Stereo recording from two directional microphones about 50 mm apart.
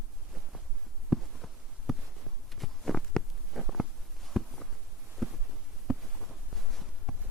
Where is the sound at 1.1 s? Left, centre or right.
Centre.